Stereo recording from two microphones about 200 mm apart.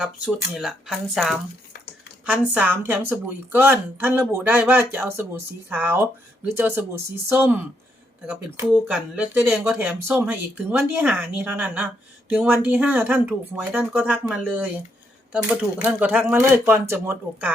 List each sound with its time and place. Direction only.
0.0 s speech: 5° right (ahead or behind)
15.8 s speech: 5° right (ahead or behind)